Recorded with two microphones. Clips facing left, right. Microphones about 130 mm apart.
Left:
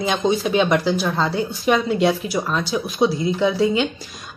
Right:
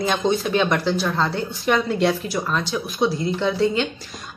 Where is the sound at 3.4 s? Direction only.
5° left (ahead or behind).